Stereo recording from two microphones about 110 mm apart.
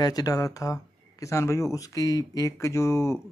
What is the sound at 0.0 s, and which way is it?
Speech, 35° left (ahead or behind).